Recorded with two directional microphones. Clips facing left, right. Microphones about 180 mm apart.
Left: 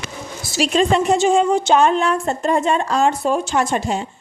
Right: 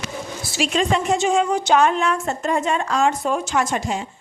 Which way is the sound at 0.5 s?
35° left (ahead or behind).